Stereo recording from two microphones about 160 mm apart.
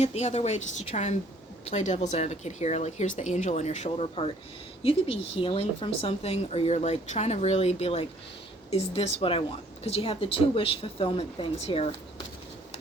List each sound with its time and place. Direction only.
0.0 s speech: 45° left (ahead or behind)